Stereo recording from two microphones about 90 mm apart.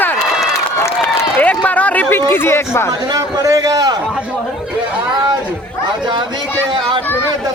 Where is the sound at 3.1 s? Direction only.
40° right (ahead or behind).